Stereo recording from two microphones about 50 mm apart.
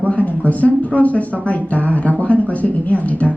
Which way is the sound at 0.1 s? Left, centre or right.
Left.